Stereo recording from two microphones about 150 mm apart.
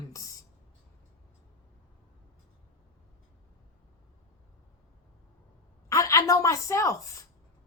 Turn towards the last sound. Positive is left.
turn(degrees=20)  # may be behind; listen again after turning